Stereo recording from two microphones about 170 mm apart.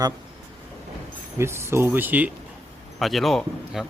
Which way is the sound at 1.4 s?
15° right (ahead or behind).